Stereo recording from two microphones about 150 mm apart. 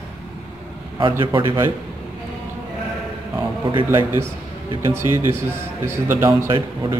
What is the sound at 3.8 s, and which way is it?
A man's voice, 15° right (ahead or behind).